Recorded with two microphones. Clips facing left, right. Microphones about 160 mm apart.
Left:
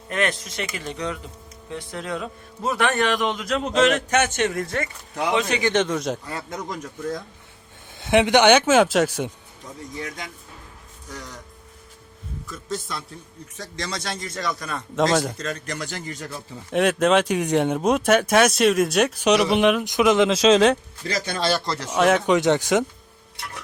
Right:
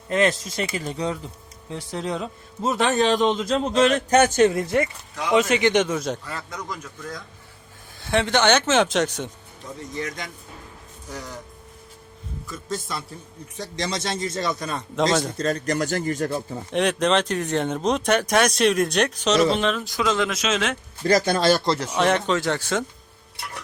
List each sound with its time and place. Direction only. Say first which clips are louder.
0.1 s a man's voice: right 4 dB; 30° right (ahead or behind)
5.3 s a man's voice: right 4 dB; 15° right (ahead or behind)
8.0 s speech: left 4 dB; 15° left (ahead or behind)
11.1 s speech: right 2 dB; 10° right (ahead or behind)
12.5 s a man's voice: even; centre (ahead or behind)
13.6 s a man's voice: right 4 dB; 20° right (ahead or behind)
14.9 s a man's voice: left 1 dB; centre (ahead or behind)
15.4 s speech: right 7 dB; 35° right (ahead or behind)
16.7 s speech: left 2 dB; 5° left (ahead or behind); by 20.4 s 20° left (ahead or behind)
20.4 s speech: left 9 dB; 35° left (ahead or behind)
21.2 s speech: right 4 dB; 45° right (ahead or behind)
21.8 s a man's voice: left 5 dB; 5° left (ahead or behind)
22.3 s speech: left 5 dB; 20° left (ahead or behind)